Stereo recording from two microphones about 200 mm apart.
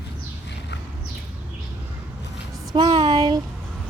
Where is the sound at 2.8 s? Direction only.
25° right (ahead or behind).